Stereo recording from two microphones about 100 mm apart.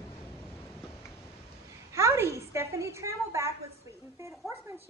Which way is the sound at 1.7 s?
30° right (ahead or behind).